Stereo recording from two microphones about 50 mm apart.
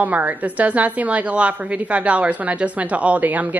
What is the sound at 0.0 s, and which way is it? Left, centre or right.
Speech, right.